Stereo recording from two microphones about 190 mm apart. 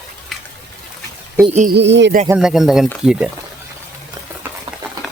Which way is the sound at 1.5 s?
40° right (ahead or behind).